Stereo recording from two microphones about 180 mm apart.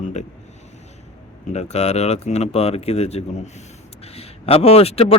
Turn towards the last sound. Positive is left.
turn(degrees=35)  # may be behind; listen again after turning